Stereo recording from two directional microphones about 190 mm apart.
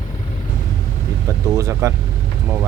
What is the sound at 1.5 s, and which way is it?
Vehicle, 15° right (ahead or behind).